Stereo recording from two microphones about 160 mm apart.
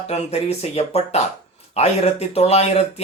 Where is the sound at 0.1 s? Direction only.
40° left (ahead or behind).